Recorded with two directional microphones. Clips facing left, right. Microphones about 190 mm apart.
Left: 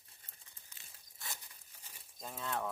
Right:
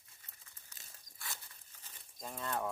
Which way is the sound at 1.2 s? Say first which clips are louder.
Even; 15° left (ahead or behind).